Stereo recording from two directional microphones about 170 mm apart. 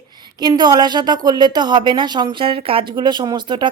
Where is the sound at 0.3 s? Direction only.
25° right (ahead or behind).